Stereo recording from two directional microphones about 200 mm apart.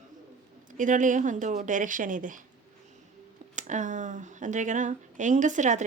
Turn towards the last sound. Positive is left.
turn(degrees=-35)  # may be behind; listen again after turning